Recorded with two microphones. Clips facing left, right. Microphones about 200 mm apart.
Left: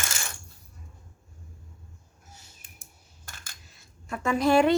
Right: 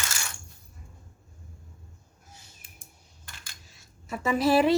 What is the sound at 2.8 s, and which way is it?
Coin, 45° left (ahead or behind).